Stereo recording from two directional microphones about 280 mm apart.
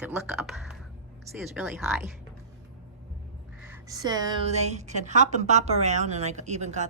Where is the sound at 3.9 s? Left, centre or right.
Centre.